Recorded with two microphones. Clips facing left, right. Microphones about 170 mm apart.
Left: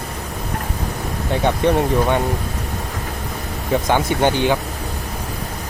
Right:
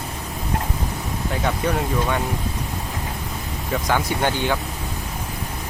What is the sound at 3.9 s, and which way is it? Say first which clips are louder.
Speech: left 4 dB; 20° left (ahead or behind).